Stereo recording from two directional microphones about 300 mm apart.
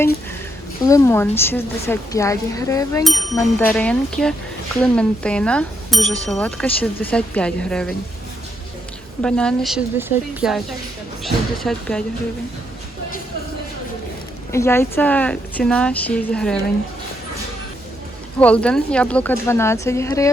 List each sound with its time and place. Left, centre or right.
0.9 s a woman's voice: centre
9.2 s speech: centre
14.5 s speech: centre
18.3 s a woman's voice: centre